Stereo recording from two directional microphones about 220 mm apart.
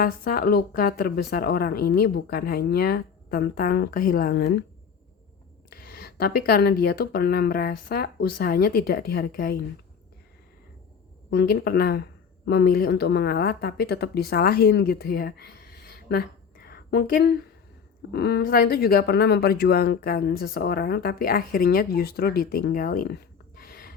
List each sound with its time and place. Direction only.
0.0 s speech: 40° left (ahead or behind)
5.7 s a sound: 45° left (ahead or behind)
6.8 s speech: 45° left (ahead or behind)
11.3 s speech: 50° left (ahead or behind)